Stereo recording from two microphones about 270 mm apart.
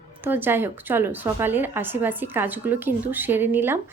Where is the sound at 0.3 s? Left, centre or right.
Centre.